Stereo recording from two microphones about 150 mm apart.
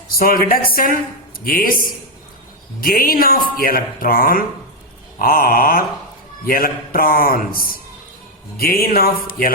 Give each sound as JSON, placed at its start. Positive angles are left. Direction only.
{"t": 0.2, "sound": "speech", "side_deg": 75}
{"t": 2.8, "sound": "speech", "side_deg": 75}